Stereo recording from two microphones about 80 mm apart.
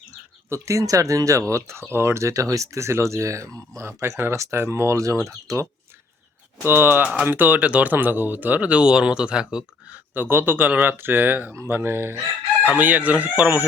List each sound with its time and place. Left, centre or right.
0.5 s speech: right
6.7 s speech: right
10.2 s speech: right
12.6 s speech: centre